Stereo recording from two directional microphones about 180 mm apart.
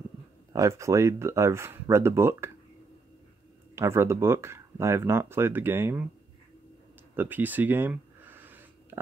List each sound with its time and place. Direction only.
0.5 s speech: 20° right (ahead or behind)
3.7 s speech: 15° right (ahead or behind)
7.2 s a sound: 10° right (ahead or behind)